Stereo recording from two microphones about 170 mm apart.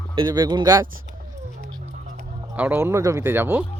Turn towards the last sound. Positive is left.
turn(degrees=-10)  # may be behind; listen again after turning